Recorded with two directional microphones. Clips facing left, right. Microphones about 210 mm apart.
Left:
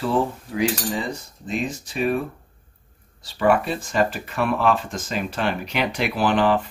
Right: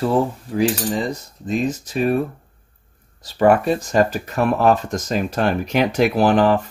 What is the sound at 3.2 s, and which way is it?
Speech, 40° right (ahead or behind).